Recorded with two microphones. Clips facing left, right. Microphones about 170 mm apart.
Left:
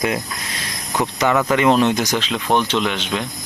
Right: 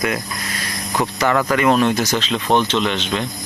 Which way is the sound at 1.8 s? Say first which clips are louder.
Even; 20° left (ahead or behind).